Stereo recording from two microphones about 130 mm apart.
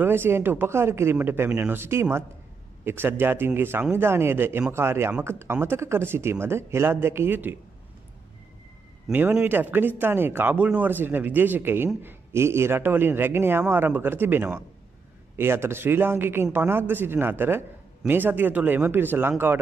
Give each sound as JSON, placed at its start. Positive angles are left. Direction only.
{"t": 0.0, "sound": "a man's voice", "side_deg": -15}
{"t": 9.0, "sound": "a man's voice", "side_deg": -10}